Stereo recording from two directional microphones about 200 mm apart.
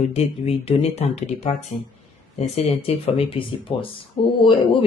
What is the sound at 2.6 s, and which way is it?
Speech, 30° left (ahead or behind).